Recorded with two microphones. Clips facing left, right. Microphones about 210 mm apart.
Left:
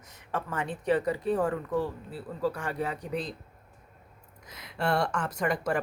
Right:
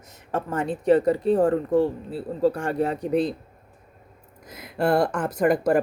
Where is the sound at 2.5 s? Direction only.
45° right (ahead or behind).